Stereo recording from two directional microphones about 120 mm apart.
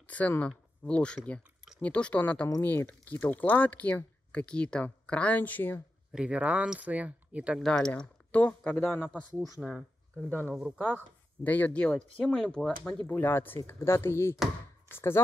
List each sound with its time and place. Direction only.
0.0 s speech: 10° left (ahead or behind)
6.1 s speech: 10° right (ahead or behind)
7.6 s speech: 5° left (ahead or behind)
9.6 s speech: centre (ahead or behind)
11.4 s speech: 15° left (ahead or behind)
13.0 s speech: 20° left (ahead or behind)